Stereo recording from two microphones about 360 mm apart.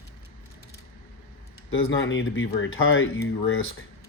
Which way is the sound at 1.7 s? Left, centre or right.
Left.